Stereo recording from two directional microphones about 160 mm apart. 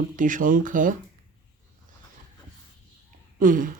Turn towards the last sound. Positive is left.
turn(degrees=-55)  # may be behind; listen again after turning